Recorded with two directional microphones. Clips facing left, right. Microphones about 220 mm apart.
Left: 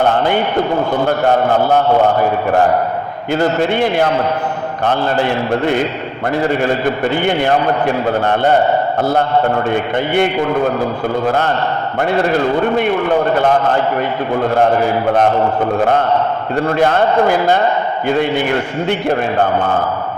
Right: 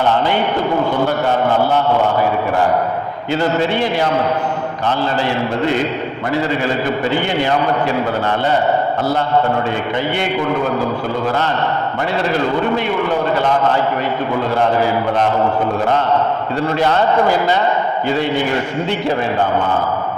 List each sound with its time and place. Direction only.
3.3 s a man's voice: 50° left (ahead or behind)
6.7 s a man's voice: 55° left (ahead or behind)
16.6 s a man's voice: 50° left (ahead or behind)
18.9 s a man's voice: 55° left (ahead or behind)